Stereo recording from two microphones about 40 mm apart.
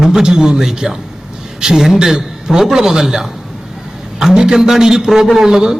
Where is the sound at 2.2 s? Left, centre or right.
Centre.